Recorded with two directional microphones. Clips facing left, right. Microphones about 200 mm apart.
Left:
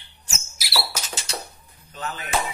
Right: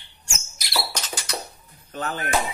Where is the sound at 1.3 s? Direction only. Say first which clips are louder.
Right 1 dB; 30° left (ahead or behind).